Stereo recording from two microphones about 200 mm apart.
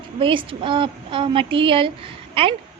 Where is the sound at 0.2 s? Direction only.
25° right (ahead or behind).